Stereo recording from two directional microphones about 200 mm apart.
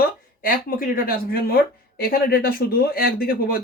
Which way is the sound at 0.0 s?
45° left (ahead or behind).